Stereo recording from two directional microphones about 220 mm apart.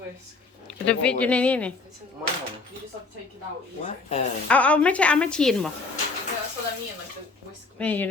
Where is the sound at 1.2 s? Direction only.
5° left (ahead or behind).